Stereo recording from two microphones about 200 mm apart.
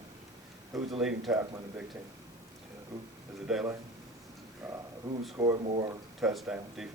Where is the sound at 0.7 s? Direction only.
Centre (ahead or behind).